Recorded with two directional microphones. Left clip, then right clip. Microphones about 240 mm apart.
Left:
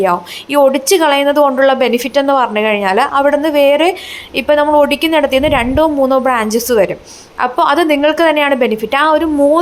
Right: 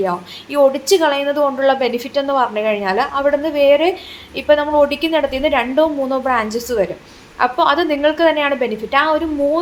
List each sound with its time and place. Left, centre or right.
0.0 s a woman's voice: left